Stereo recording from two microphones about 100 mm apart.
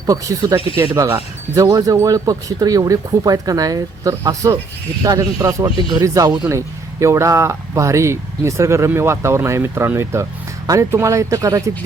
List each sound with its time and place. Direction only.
0.0 s speech: 35° right (ahead or behind)